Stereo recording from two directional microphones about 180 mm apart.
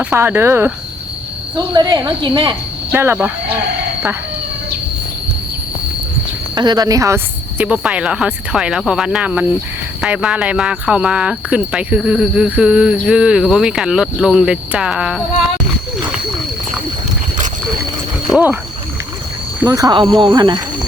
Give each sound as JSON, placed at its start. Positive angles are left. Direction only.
{"t": 0.0, "sound": "speech", "side_deg": -10}
{"t": 6.6, "sound": "speech", "side_deg": -20}
{"t": 7.6, "sound": "speech", "side_deg": -5}
{"t": 19.6, "sound": "speech", "side_deg": -20}